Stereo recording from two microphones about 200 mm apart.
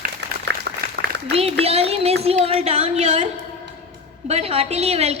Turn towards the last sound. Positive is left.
turn(degrees=-30)  # may be behind; listen again after turning